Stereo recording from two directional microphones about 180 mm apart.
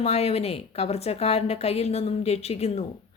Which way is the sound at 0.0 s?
35° left (ahead or behind).